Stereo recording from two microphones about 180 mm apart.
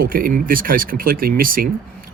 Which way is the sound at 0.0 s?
50° right (ahead or behind).